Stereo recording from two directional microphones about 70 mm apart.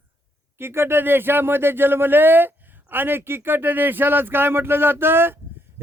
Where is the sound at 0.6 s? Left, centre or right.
Right.